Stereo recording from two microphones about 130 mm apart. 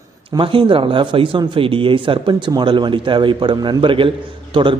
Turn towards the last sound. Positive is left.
turn(degrees=-40)  # may be behind; listen again after turning